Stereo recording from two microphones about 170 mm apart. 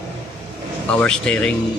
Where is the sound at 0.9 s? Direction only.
5° left (ahead or behind).